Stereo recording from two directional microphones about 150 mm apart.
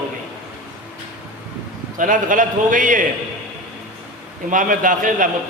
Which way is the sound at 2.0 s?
60° right (ahead or behind).